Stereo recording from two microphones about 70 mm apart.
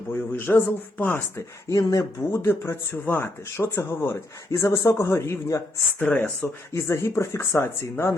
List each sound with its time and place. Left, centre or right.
0.1 s speech: left
1.7 s speech: left
2.3 s speech: left
6.0 s speech: left
6.7 s speech: left